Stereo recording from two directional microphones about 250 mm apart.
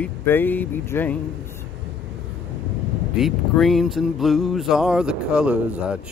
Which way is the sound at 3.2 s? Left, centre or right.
Centre.